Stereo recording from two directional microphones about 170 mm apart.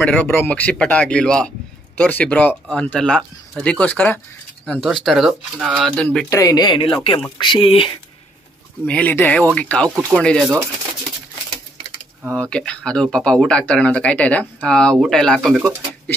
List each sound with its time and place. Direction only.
0.0 s speech: 10° left (ahead or behind)
4.7 s speech: centre (ahead or behind)
6.3 s speech: 20° left (ahead or behind)
8.8 s speech: 10° left (ahead or behind)
12.4 s speech: 5° left (ahead or behind)